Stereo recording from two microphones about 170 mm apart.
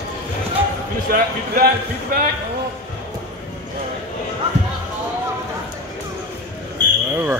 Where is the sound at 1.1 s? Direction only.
60° right (ahead or behind).